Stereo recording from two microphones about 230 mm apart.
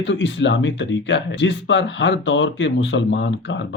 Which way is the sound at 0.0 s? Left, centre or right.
Left.